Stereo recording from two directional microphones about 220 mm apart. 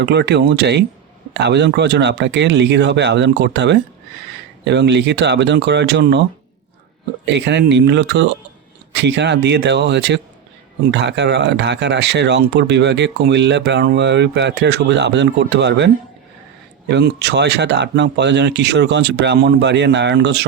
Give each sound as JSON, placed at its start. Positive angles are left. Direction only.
{"t": 0.0, "sound": "speech", "side_deg": -50}
{"t": 7.3, "sound": "speech", "side_deg": -55}
{"t": 16.9, "sound": "speech", "side_deg": -50}